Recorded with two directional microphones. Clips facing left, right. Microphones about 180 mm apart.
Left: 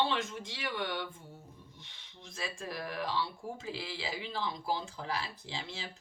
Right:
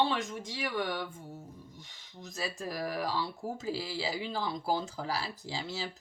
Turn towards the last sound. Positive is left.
turn(degrees=-40)  # may be behind; listen again after turning